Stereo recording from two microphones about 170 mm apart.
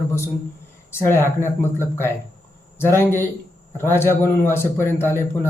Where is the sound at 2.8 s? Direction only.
15° left (ahead or behind).